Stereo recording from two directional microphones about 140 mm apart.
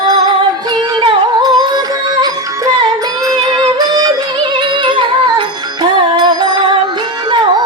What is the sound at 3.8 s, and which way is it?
Music, 25° right (ahead or behind).